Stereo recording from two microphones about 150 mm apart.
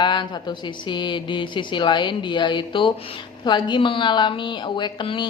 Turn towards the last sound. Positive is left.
turn(degrees=30)  # may be behind; listen again after turning